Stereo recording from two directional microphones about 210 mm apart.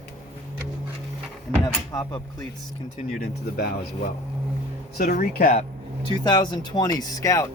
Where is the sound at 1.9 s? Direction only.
20° left (ahead or behind).